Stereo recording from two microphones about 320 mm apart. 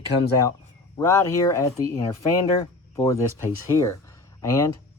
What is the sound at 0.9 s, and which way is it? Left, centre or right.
Speech, centre.